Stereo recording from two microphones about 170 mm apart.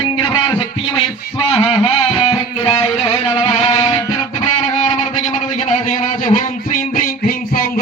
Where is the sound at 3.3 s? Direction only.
40° left (ahead or behind).